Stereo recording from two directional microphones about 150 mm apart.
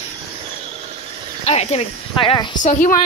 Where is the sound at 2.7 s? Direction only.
60° left (ahead or behind).